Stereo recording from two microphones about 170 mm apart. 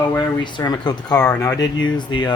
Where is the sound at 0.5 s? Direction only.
25° left (ahead or behind).